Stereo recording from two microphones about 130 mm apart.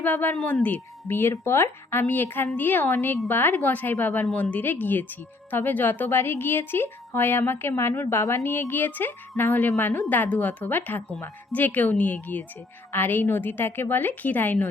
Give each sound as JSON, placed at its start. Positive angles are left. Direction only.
{"t": 0.0, "sound": "speech", "side_deg": 15}